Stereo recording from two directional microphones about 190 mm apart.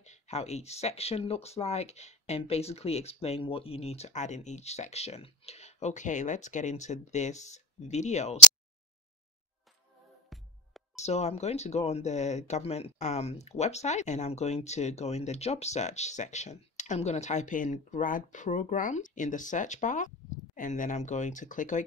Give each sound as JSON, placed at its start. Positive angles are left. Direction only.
{"t": 0.0, "sound": "speech", "side_deg": 35}
{"t": 10.3, "sound": "music", "side_deg": 0}
{"t": 11.0, "sound": "speech", "side_deg": 35}